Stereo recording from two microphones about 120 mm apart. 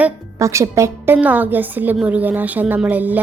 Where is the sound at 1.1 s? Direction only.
15° right (ahead or behind).